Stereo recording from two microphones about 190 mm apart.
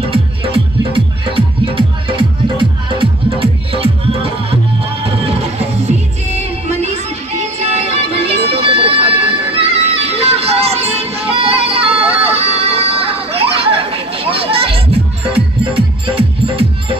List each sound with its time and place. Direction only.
0.1 s music: 30° right (ahead or behind)
7.3 s music: 35° right (ahead or behind)